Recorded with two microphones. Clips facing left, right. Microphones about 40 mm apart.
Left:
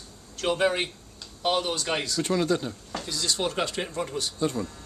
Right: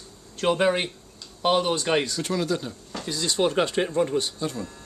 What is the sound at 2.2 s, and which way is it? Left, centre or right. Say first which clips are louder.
Speech: left 1 dB; centre.